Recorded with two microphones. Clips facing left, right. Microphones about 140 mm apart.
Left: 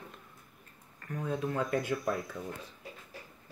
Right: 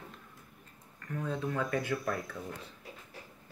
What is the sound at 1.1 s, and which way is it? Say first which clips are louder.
Speech: left 1 dB; 15° left (ahead or behind).